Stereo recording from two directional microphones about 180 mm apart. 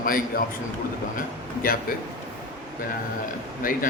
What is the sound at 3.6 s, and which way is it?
Speech, 50° left (ahead or behind).